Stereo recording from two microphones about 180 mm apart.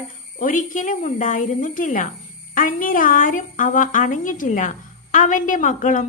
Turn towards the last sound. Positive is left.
turn(degrees=45)  # may be behind; listen again after turning